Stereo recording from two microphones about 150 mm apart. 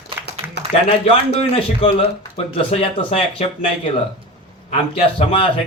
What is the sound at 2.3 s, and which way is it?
Speech, 45° left (ahead or behind).